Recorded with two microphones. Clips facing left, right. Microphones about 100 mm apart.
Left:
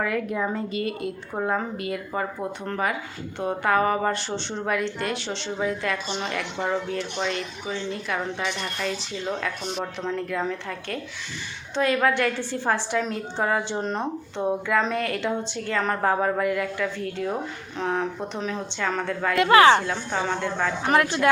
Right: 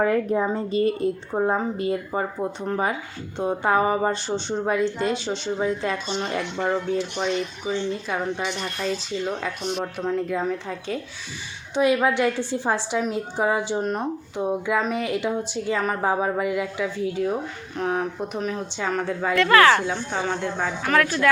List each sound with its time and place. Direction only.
0.0 s speech: 35° right (ahead or behind)
1.3 s speech: 20° right (ahead or behind)
6.1 s speech: 5° right (ahead or behind); by 8.9 s 20° right (ahead or behind)
9.7 s a woman's voice: 5° right (ahead or behind)
19.4 s speech: 20° left (ahead or behind)
19.9 s speech: centre (ahead or behind)
20.8 s speech: 20° left (ahead or behind)